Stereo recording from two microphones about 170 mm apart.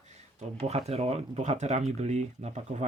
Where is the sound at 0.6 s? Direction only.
40° right (ahead or behind).